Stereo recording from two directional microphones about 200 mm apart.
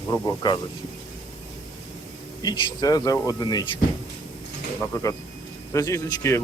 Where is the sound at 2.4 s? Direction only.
20° left (ahead or behind).